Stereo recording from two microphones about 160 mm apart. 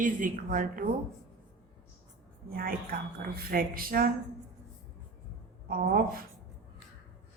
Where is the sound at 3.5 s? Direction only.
65° right (ahead or behind).